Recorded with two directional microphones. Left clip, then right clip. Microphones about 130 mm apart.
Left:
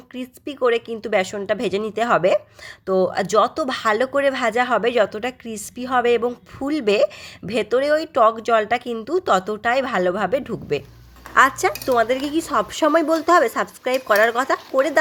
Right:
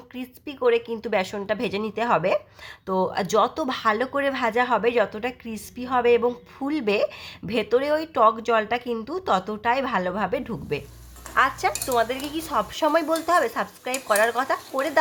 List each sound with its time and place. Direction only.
0.1 s speech: 20° left (ahead or behind)
11.3 s speech: 40° left (ahead or behind)